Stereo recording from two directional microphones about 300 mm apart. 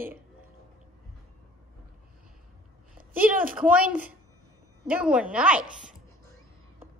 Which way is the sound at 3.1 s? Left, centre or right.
Right.